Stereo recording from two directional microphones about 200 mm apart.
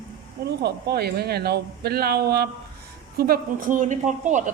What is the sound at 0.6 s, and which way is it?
A woman's voice, 55° right (ahead or behind).